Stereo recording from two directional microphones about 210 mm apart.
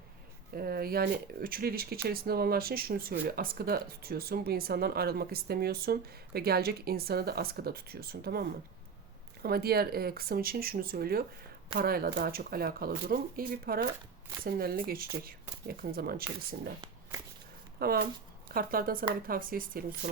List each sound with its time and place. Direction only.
0.5 s speech: 45° right (ahead or behind)
17.7 s speech: 45° right (ahead or behind)